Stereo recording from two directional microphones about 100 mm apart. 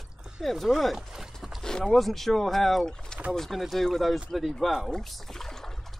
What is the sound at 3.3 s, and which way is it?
Speech, centre (ahead or behind).